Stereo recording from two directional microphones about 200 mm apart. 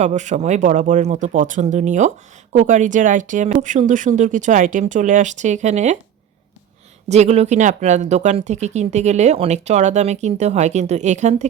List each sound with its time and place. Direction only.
0.0 s speech: 35° right (ahead or behind)
7.1 s speech: 35° right (ahead or behind)